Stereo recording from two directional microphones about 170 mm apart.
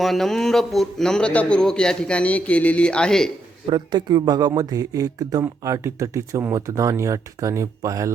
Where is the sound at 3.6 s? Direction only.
25° right (ahead or behind).